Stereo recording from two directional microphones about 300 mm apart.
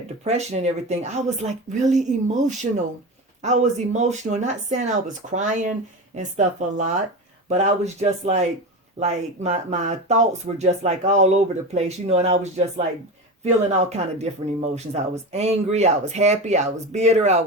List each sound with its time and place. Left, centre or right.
0.3 s speech: right
3.4 s speech: right